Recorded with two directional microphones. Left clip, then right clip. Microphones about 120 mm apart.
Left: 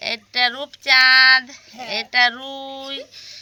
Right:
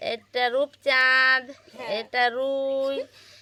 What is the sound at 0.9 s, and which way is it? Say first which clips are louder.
Child singing: left 8 dB; 90° right.